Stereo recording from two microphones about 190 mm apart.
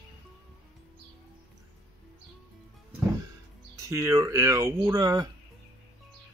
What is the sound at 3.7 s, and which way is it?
Speech, 15° right (ahead or behind).